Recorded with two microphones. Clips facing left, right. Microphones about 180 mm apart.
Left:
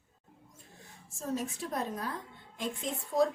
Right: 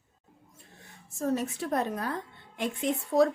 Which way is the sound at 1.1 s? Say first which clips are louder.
Right 6 dB; 65° right (ahead or behind).